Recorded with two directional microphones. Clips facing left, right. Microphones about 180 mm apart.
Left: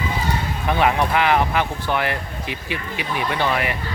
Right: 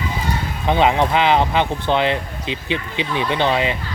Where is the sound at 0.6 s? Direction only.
20° right (ahead or behind).